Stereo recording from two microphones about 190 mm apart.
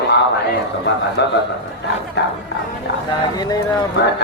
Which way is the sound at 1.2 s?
65° left (ahead or behind).